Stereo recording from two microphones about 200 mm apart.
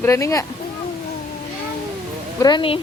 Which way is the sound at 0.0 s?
15° left (ahead or behind).